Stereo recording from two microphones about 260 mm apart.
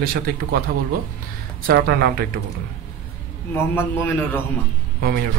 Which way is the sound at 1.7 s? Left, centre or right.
Right.